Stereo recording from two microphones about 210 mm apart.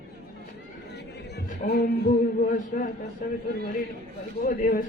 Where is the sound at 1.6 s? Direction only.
45° left (ahead or behind).